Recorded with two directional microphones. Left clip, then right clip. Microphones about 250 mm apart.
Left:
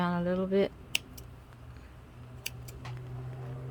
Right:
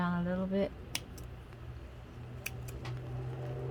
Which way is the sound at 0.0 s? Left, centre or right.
Left.